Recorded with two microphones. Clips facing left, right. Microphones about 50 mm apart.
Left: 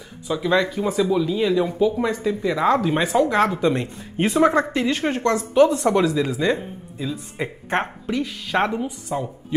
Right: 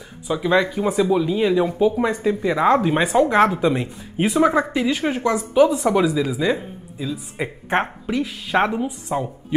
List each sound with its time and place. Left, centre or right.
0.3 s a woman's voice: centre